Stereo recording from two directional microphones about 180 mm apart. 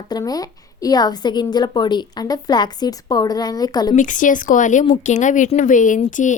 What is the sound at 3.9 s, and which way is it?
A woman's voice, 45° left (ahead or behind).